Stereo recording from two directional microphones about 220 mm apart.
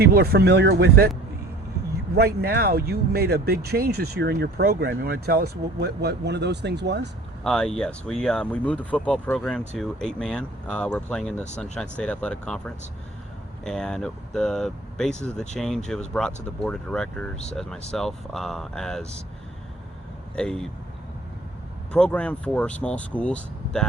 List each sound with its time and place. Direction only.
0.0 s speech: 45° right (ahead or behind)
2.1 s speech: 45° right (ahead or behind)
7.4 s speech: centre (ahead or behind)
20.3 s speech: 5° left (ahead or behind)
21.9 s speech: 5° left (ahead or behind)